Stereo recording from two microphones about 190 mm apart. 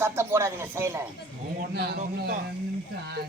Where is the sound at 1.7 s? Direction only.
60° right (ahead or behind).